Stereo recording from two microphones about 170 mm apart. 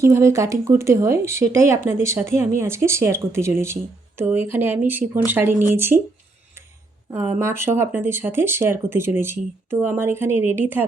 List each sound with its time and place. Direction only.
0.0 s speech: 15° right (ahead or behind)
7.1 s speech: 15° right (ahead or behind)